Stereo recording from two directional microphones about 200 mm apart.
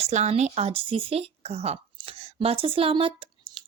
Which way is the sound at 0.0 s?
35° right (ahead or behind).